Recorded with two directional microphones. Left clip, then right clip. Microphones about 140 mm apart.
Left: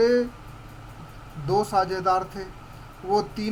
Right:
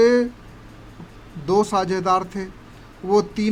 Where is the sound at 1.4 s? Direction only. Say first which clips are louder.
Right 3 dB; 25° right (ahead or behind).